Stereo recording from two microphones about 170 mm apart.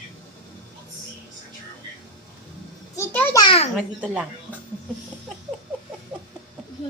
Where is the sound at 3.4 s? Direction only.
30° left (ahead or behind).